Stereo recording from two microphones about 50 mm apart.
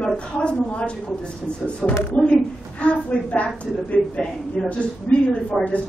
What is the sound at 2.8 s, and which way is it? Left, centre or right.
Speech, left.